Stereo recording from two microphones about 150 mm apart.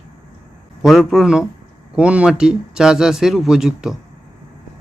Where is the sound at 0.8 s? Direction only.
Centre (ahead or behind).